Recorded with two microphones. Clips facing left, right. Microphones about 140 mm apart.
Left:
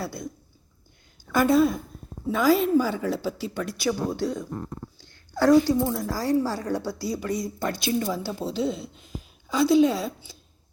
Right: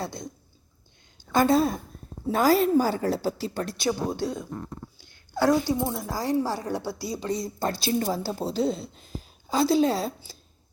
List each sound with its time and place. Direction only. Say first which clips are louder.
0.0 s a woman's voice: left 1 dB; 20° right (ahead or behind)
1.3 s a woman's voice: left 1 dB; 25° right (ahead or behind)
4.1 s a woman's voice: left 2 dB; 15° right (ahead or behind); by 10.3 s 35° right (ahead or behind)